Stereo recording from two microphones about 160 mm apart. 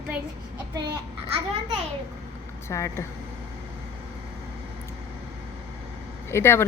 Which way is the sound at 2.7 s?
15° left (ahead or behind).